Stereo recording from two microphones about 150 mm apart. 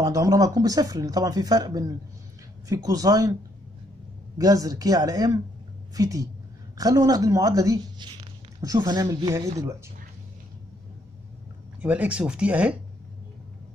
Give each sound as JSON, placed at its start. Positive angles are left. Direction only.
{"t": 0.0, "sound": "speech", "side_deg": -25}
{"t": 4.4, "sound": "speech", "side_deg": -25}
{"t": 11.8, "sound": "speech", "side_deg": -10}